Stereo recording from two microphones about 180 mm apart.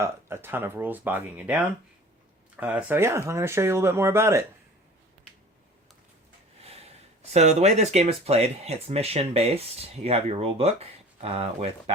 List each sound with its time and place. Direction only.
0.0 s speech: 15° right (ahead or behind)
6.6 s speech: 35° right (ahead or behind)